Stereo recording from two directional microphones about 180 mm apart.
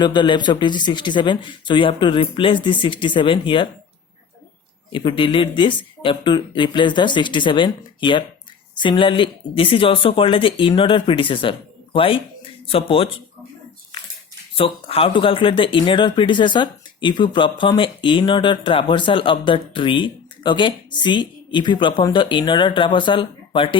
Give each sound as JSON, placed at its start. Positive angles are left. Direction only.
{"t": 0.0, "sound": "speech", "side_deg": 25}
{"t": 4.9, "sound": "speech", "side_deg": 30}
{"t": 14.5, "sound": "speech", "side_deg": 30}